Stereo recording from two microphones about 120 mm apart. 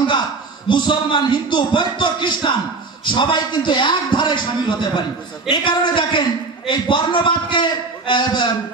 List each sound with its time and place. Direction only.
0.7 s a man's voice: 40° left (ahead or behind)